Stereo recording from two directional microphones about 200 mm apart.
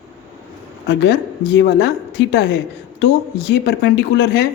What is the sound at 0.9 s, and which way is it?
Speech, 60° left (ahead or behind).